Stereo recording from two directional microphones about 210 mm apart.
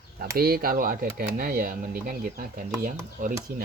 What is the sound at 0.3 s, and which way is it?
Speech, 45° right (ahead or behind).